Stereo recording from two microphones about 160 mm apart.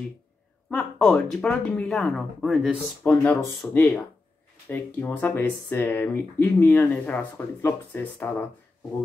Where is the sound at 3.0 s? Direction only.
10° left (ahead or behind).